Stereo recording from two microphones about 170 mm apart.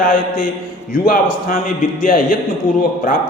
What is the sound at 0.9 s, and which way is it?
A man's voice, 55° left (ahead or behind).